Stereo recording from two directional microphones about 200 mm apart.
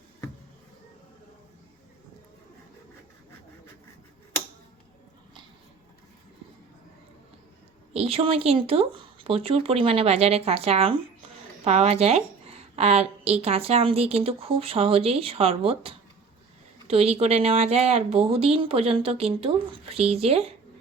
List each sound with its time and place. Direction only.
7.9 s speech: 30° right (ahead or behind)